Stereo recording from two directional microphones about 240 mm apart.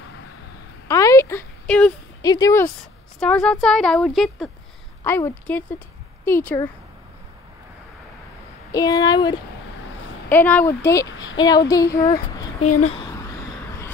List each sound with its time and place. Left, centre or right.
0.8 s a sound: centre
2.2 s a woman's voice: centre
8.7 s speech: centre
12.6 s a woman's voice: left